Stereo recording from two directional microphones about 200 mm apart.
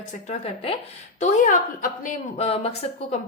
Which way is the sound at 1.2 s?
40° left (ahead or behind).